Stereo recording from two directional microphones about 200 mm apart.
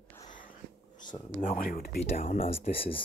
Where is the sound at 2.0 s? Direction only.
35° left (ahead or behind).